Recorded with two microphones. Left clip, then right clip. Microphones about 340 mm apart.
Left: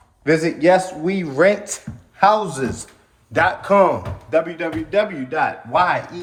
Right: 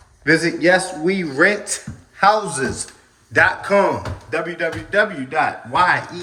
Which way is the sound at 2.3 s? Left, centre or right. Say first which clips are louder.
Right 2 dB; centre.